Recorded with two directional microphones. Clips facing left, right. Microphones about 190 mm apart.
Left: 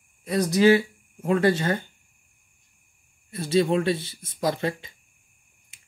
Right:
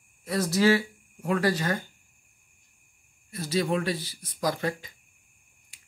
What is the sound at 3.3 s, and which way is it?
Speech, 30° left (ahead or behind).